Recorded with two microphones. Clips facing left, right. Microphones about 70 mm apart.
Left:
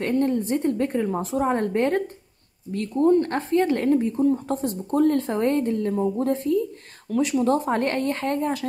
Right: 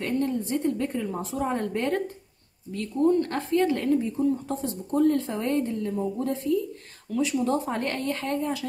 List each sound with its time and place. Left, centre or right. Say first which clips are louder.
0.0 s a woman's voice: left 4 dB; left